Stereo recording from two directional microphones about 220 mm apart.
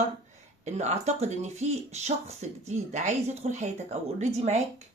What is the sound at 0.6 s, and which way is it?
Speech, 30° right (ahead or behind).